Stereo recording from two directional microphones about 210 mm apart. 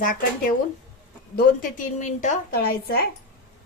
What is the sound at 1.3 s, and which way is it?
A woman's voice, 40° left (ahead or behind).